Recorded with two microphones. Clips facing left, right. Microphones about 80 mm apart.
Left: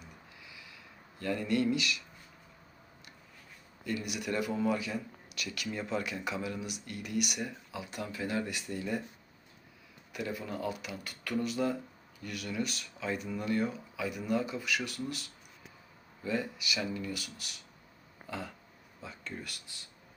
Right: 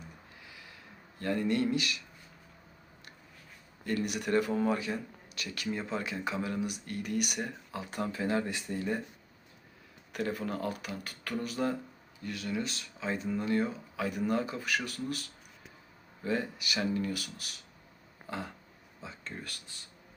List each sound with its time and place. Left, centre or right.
0.4 s a sound: right
1.2 s speech: right
3.8 s speech: right
10.1 s speech: right
13.9 s speech: right
16.2 s speech: right